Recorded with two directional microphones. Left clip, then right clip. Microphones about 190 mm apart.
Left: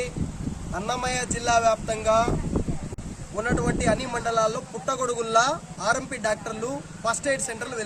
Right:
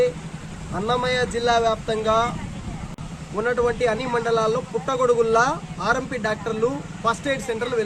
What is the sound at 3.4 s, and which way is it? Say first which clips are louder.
A man's voice: right 5 dB; 20° left (ahead or behind).